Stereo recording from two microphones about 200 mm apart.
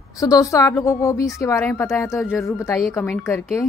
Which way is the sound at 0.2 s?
15° left (ahead or behind).